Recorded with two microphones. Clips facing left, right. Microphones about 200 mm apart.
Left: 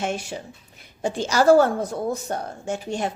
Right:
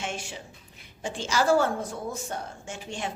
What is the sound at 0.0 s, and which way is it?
A woman's voice, 40° left (ahead or behind).